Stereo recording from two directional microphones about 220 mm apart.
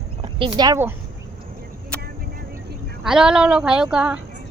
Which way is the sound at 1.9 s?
5° left (ahead or behind).